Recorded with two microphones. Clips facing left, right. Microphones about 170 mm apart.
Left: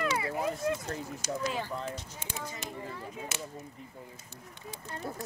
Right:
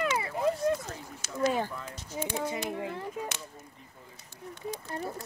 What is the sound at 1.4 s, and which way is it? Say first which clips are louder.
Speech: right 9 dB; 50° right (ahead or behind).